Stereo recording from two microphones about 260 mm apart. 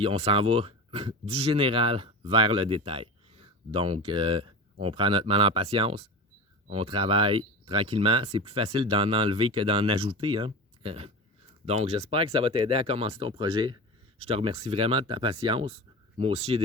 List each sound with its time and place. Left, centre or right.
0.0 s speech: right